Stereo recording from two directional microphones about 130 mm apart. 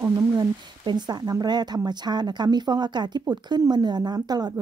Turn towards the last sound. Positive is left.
turn(degrees=-30)  # may be behind; listen again after turning